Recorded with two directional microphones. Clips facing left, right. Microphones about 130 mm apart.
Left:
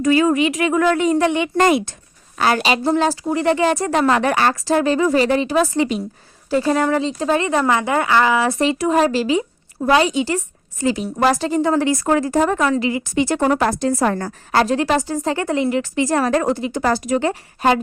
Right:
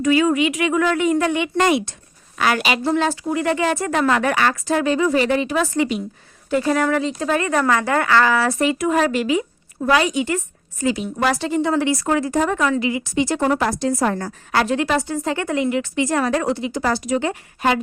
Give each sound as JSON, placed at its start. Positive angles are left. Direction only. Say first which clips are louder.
{"t": 0.0, "sound": "a woman's voice", "louder": "left 1 dB", "side_deg": 35}
{"t": 1.5, "sound": "speech", "louder": "left 2 dB", "side_deg": 45}
{"t": 2.4, "sound": "a woman's voice", "louder": "left 2 dB", "side_deg": 30}
{"t": 14.5, "sound": "a woman's voice", "louder": "left 2 dB", "side_deg": 35}